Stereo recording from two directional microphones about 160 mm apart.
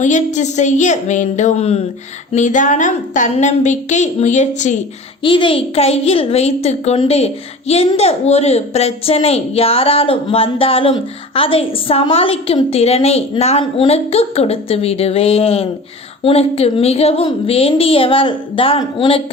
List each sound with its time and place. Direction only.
0.0 s a woman's voice: 50° left (ahead or behind)
5.2 s a child's voice: 30° left (ahead or behind)